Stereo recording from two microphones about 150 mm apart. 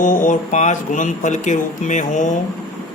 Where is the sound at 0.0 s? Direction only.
60° left (ahead or behind).